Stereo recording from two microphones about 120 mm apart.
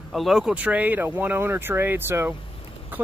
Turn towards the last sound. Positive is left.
turn(degrees=-15)  # may be behind; listen again after turning